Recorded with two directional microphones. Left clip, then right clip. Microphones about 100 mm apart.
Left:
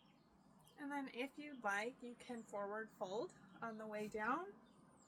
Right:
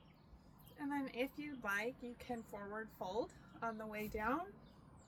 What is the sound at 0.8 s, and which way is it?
A woman's voice, 35° left (ahead or behind).